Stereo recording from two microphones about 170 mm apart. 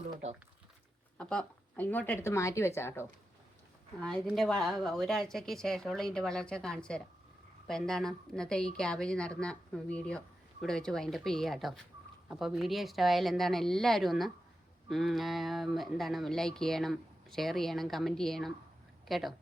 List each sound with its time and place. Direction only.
0.1 s speech: 40° right (ahead or behind)
1.2 s a woman's voice: 5° left (ahead or behind)
4.0 s a woman's voice: centre (ahead or behind)